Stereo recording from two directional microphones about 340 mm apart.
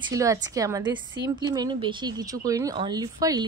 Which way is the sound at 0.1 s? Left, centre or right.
Centre.